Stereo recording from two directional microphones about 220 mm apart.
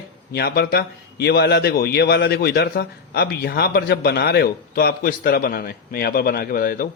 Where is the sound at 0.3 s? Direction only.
45° left (ahead or behind).